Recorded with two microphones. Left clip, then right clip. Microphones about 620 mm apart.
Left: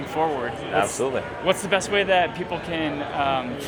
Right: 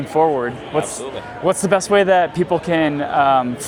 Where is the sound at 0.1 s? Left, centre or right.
Right.